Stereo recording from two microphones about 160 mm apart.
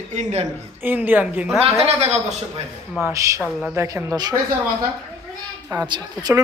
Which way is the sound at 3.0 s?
20° right (ahead or behind).